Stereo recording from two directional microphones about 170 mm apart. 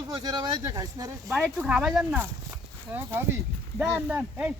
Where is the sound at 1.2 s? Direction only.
Centre (ahead or behind).